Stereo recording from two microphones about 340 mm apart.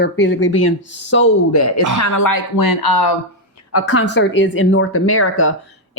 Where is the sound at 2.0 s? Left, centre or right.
Left.